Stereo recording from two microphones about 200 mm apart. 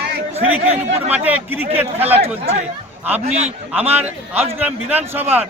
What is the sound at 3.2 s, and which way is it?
Speech, 35° right (ahead or behind).